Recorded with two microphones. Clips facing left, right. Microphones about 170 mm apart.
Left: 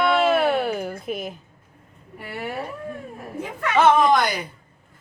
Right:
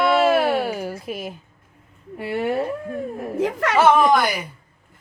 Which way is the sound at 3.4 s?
90° right.